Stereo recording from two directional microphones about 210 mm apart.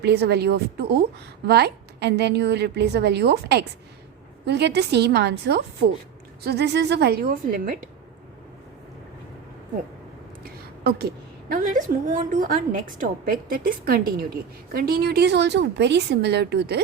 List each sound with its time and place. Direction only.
0.0 s a woman's voice: 50° right (ahead or behind)
10.8 s a woman's voice: 45° right (ahead or behind)